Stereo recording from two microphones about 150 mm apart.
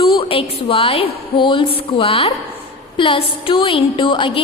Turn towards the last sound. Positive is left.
turn(degrees=35)  # may be behind; listen again after turning